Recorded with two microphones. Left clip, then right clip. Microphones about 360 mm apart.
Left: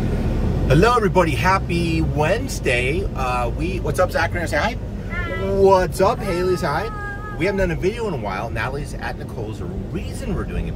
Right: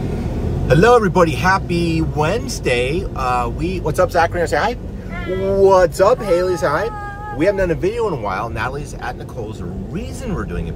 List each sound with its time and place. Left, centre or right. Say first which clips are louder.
0.7 s speech: right 5 dB; centre